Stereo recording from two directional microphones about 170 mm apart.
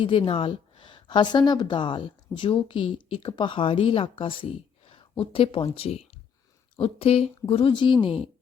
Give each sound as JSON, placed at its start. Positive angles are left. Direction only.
{"t": 0.0, "sound": "a woman's voice", "side_deg": 30}